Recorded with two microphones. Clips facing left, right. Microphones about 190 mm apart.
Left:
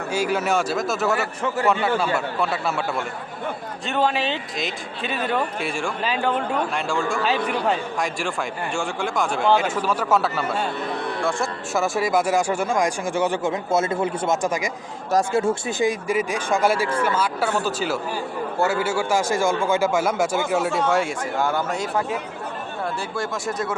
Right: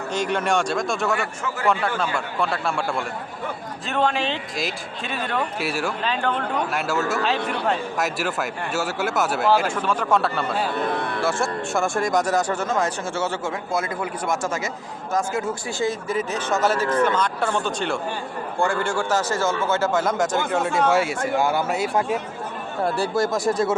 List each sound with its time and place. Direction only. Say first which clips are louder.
0.1 s speech: left 1 dB; 5° left (ahead or behind)
6.7 s speech: even; 5° right (ahead or behind); by 14.7 s 15° left (ahead or behind)
15.1 s speech: left 4 dB; 30° left (ahead or behind)
15.8 s speech: left 1 dB; 15° left (ahead or behind)
20.9 s speech: right 2 dB; 5° right (ahead or behind)
23.0 s speech: right 6 dB; 40° right (ahead or behind)